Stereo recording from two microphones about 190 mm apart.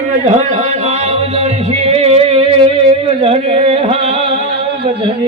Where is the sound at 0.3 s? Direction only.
35° right (ahead or behind).